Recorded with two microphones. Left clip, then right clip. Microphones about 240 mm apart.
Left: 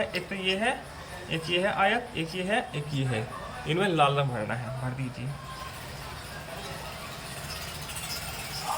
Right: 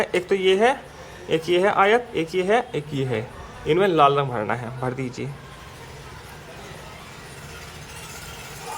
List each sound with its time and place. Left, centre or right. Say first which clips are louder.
0.0 s a man's voice: right 9 dB; right